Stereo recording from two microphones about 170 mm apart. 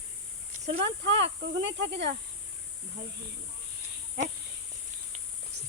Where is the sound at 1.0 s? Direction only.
90° right.